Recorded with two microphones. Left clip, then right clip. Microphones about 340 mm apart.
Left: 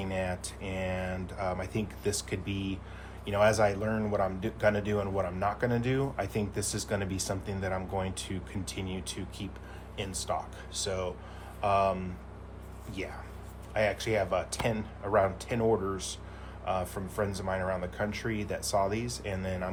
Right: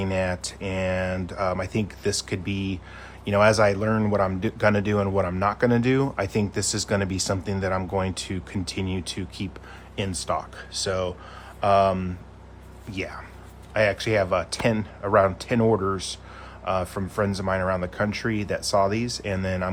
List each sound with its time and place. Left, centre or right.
0.0 s a man's voice: right